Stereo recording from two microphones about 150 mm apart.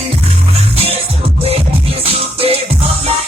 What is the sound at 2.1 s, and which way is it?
Music, 40° right (ahead or behind).